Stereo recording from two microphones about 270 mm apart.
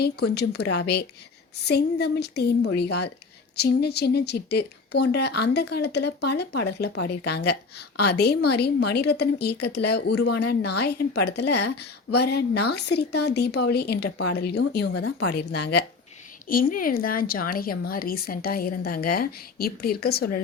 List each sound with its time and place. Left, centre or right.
0.3 s speech: left